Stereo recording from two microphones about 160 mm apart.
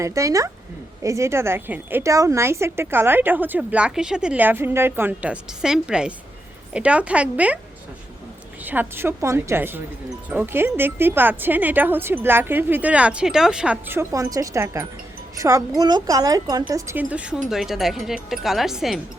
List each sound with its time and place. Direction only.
0.0 s a woman's voice: 20° right (ahead or behind)
8.6 s a woman's voice: 10° right (ahead or behind)